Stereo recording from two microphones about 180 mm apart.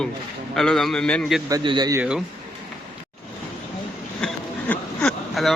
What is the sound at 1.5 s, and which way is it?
Speech, 20° right (ahead or behind).